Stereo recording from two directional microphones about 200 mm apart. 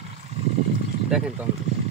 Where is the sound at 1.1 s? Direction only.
5° right (ahead or behind).